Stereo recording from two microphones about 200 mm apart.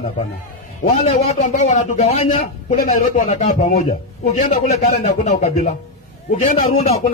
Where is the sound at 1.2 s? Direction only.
30° left (ahead or behind).